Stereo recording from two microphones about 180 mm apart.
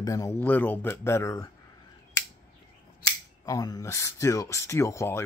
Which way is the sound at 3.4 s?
20° left (ahead or behind).